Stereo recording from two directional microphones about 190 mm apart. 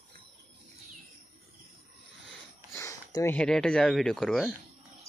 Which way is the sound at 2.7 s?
15° left (ahead or behind).